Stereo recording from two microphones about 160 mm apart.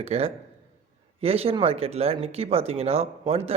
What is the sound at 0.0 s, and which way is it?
Speech, 40° right (ahead or behind).